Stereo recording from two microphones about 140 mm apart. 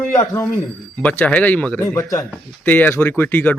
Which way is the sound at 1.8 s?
25° left (ahead or behind).